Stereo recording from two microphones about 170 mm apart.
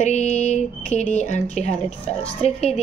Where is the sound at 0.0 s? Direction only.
40° left (ahead or behind).